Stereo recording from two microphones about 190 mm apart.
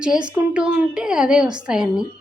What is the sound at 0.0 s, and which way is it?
A woman's voice, 5° right (ahead or behind).